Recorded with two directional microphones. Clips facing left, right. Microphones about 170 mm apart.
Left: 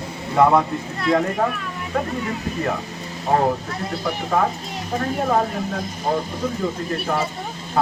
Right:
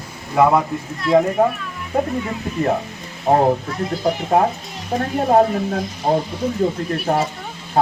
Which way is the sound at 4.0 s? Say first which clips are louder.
Right 4 dB; 35° right (ahead or behind).